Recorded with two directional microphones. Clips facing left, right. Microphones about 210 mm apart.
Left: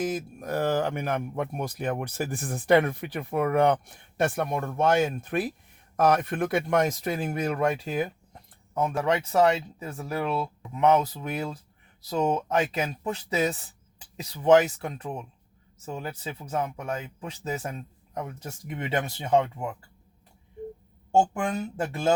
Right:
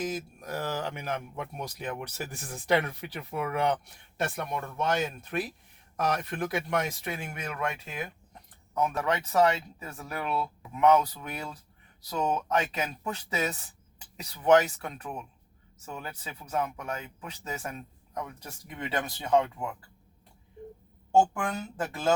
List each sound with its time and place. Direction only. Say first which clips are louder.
0.0 s speech: left 4 dB; 55° left (ahead or behind); by 19.6 s 25° left (ahead or behind)